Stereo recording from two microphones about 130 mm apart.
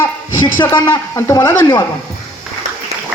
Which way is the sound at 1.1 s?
30° left (ahead or behind).